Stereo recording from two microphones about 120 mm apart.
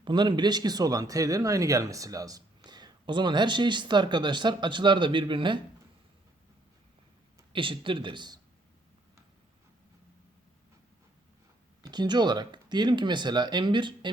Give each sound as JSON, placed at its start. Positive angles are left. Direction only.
{"t": 0.0, "sound": "speech", "side_deg": -40}
{"t": 7.5, "sound": "a man's voice", "side_deg": -45}
{"t": 11.8, "sound": "speech", "side_deg": -35}